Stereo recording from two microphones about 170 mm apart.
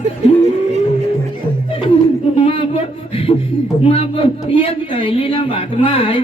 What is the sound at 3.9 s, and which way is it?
A man's voice, 35° left (ahead or behind).